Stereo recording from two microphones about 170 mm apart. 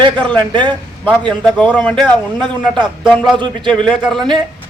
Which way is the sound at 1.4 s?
5° left (ahead or behind).